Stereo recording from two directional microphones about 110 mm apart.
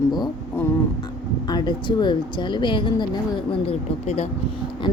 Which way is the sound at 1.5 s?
40° left (ahead or behind).